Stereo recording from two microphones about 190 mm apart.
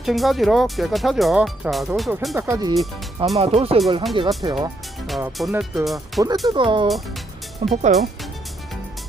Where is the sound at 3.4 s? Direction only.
30° right (ahead or behind).